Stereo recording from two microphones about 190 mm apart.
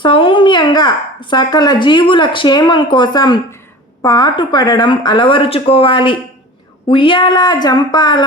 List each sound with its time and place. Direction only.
0.0 s speech: 25° left (ahead or behind)